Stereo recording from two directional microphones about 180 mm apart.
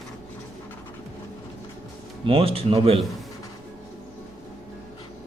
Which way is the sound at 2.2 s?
30° right (ahead or behind).